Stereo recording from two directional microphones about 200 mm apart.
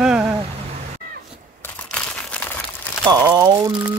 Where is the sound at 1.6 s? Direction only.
5° left (ahead or behind).